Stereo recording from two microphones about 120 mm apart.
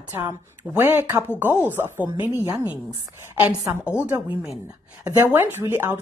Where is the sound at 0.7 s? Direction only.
20° right (ahead or behind).